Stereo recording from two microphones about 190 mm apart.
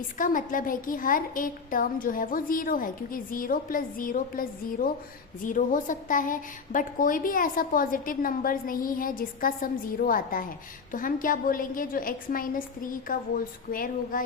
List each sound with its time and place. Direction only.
0.2 s a woman's voice: 45° left (ahead or behind)